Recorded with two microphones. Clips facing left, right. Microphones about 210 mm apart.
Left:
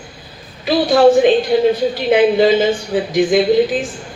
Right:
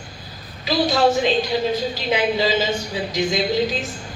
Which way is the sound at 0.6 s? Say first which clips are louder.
Left 7 dB; 55° left (ahead or behind).